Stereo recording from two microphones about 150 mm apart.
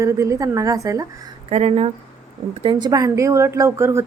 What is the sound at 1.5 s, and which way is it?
Speech, 40° right (ahead or behind).